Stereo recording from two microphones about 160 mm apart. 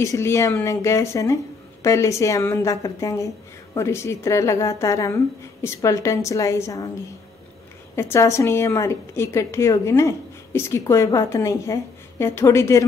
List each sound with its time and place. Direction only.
0.0 s speech: 20° left (ahead or behind)
7.9 s a woman's voice: 15° left (ahead or behind)